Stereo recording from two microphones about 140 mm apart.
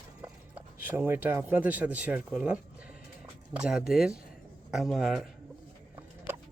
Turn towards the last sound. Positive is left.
turn(degrees=-15)  # may be behind; listen again after turning